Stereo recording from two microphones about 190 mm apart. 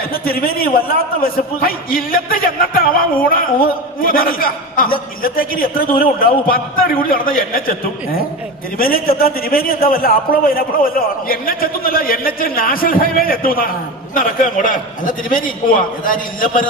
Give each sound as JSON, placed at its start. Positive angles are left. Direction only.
{"t": 0.1, "sound": "a man's voice", "side_deg": 50}